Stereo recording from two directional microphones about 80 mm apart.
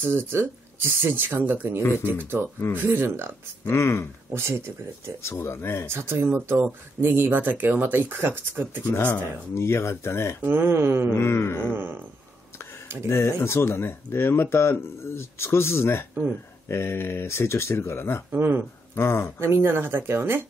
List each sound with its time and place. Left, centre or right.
0.0 s speech: right
3.7 s speech: left
4.3 s speech: right
5.2 s speech: left
5.9 s speech: right
9.5 s speech: left
10.4 s speech: right
11.1 s a sound: left
11.7 s speech: right
13.1 s speech: left
18.3 s speech: right
18.9 s speech: left
19.4 s speech: right